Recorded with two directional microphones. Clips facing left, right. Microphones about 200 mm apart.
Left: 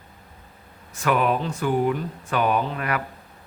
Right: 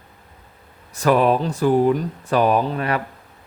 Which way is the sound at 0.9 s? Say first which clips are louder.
Right 5 dB; 35° right (ahead or behind).